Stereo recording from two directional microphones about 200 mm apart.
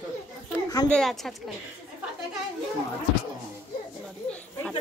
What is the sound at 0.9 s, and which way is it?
Speech, centre (ahead or behind).